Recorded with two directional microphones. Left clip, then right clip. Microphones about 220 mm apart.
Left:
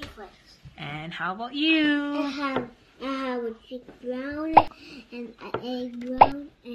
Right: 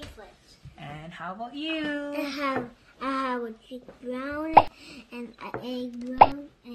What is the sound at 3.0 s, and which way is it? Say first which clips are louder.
Speech: right 1 dB; 30° right (ahead or behind).